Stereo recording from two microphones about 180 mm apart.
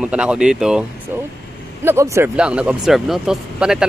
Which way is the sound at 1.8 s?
15° right (ahead or behind).